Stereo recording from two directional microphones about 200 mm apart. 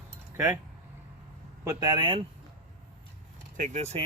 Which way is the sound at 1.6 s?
20° right (ahead or behind).